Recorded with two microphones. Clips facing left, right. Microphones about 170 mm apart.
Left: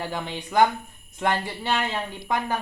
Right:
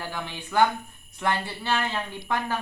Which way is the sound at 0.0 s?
20° left (ahead or behind).